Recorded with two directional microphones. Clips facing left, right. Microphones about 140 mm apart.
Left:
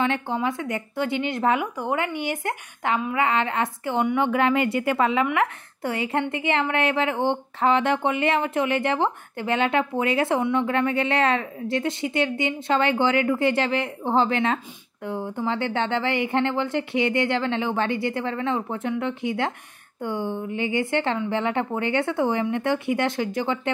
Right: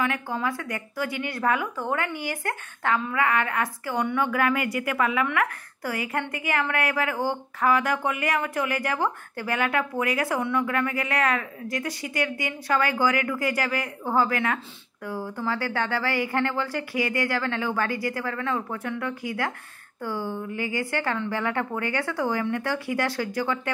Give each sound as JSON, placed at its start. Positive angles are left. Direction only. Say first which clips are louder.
{"t": 0.0, "sound": "speech", "louder": "left 3 dB", "side_deg": 25}